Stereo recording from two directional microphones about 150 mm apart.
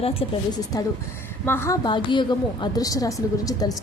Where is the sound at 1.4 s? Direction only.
15° left (ahead or behind).